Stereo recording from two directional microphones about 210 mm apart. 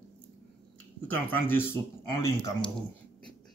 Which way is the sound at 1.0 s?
10° left (ahead or behind).